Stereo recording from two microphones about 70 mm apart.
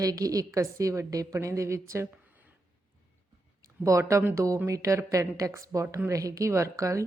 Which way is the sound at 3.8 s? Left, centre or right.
Right.